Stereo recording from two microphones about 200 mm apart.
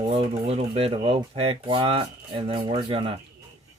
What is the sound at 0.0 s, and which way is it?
Speech, 25° right (ahead or behind).